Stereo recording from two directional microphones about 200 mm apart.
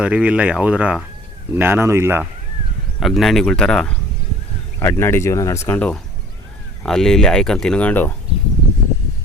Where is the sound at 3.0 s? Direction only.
Centre (ahead or behind).